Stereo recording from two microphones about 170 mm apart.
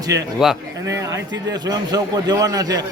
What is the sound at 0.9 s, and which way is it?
A man's voice, 20° right (ahead or behind).